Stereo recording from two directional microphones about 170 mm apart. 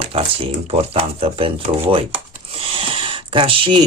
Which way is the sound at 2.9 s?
30° right (ahead or behind).